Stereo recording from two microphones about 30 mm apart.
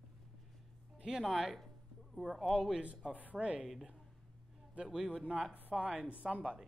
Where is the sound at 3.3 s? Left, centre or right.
Right.